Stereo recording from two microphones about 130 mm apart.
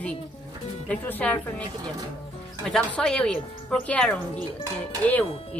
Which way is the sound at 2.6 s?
5° left (ahead or behind).